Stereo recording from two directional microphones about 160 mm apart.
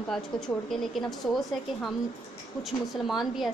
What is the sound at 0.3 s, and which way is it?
Speech, 30° left (ahead or behind).